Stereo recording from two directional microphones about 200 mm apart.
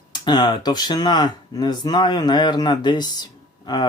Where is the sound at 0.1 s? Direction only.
20° left (ahead or behind).